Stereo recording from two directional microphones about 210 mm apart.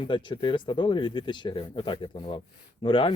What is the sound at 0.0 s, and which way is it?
Speech, 25° left (ahead or behind).